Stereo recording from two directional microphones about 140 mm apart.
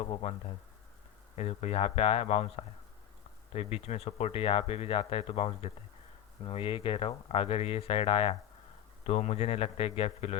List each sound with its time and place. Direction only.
0.1 s speech: 50° left (ahead or behind)
1.4 s speech: 50° left (ahead or behind)